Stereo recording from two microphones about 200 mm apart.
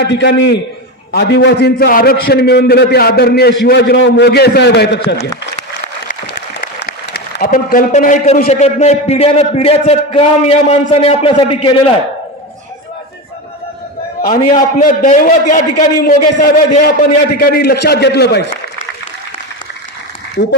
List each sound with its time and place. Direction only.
0.0 s a man's voice: 60° left (ahead or behind)
7.1 s a man's voice: 50° left (ahead or behind); by 11.9 s 25° left (ahead or behind)
14.3 s a man's voice: 40° left (ahead or behind); by 18.4 s 55° left (ahead or behind)